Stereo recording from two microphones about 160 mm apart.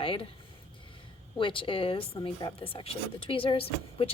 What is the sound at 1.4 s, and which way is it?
A woman's voice, 30° left (ahead or behind).